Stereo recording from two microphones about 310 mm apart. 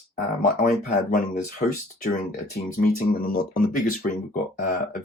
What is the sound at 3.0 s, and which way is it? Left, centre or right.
Speech, left.